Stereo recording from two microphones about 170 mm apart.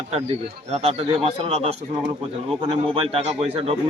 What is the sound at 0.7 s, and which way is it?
A man's voice, 35° right (ahead or behind).